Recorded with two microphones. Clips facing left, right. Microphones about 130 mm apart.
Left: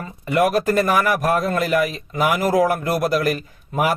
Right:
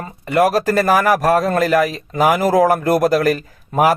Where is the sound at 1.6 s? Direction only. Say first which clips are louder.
Right 4 dB; 90° right.